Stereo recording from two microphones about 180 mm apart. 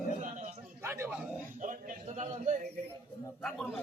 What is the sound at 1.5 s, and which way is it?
A man's voice, 45° right (ahead or behind).